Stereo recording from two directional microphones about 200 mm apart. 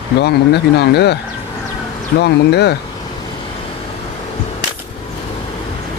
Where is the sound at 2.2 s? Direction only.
55° left (ahead or behind).